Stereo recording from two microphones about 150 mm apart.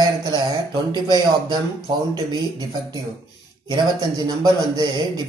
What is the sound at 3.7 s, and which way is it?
A man's voice, 30° right (ahead or behind).